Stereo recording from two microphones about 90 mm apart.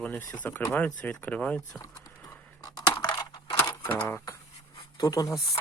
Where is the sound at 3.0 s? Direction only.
55° left (ahead or behind).